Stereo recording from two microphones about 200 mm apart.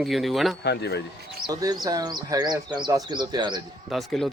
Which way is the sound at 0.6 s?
55° left (ahead or behind).